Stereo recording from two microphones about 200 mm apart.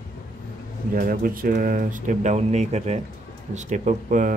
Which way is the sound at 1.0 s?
45° right (ahead or behind).